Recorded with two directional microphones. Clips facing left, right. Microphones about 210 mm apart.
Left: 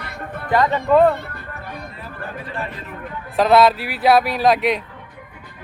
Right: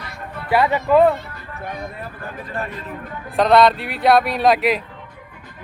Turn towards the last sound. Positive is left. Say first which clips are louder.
# even
turn(degrees=0)  # may be behind; listen again after turning